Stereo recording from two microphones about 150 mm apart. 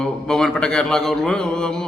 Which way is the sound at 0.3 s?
5° left (ahead or behind).